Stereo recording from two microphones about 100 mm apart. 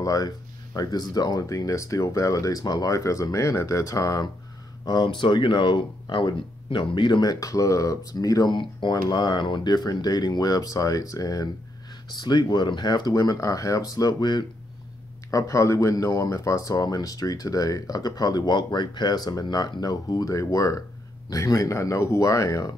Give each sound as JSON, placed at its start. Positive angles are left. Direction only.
{"t": 0.0, "sound": "speech", "side_deg": 35}
{"t": 4.8, "sound": "speech", "side_deg": 50}
{"t": 15.3, "sound": "speech", "side_deg": 30}